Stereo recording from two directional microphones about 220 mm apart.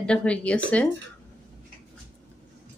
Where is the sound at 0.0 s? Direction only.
5° left (ahead or behind).